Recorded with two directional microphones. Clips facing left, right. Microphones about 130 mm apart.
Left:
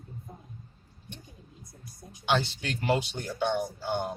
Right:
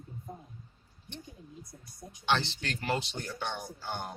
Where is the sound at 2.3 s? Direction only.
10° left (ahead or behind).